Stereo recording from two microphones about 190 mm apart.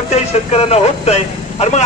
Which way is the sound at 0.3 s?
35° left (ahead or behind).